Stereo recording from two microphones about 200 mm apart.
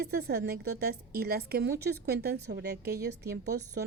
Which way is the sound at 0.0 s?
50° right (ahead or behind).